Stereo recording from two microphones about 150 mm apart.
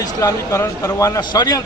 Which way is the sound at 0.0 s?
20° left (ahead or behind).